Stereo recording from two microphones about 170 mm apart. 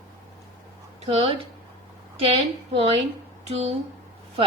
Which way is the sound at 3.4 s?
40° right (ahead or behind).